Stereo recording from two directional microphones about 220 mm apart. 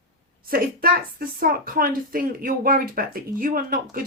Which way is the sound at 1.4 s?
40° right (ahead or behind).